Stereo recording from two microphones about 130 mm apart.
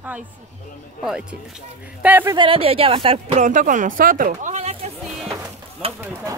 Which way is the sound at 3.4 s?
75° right (ahead or behind).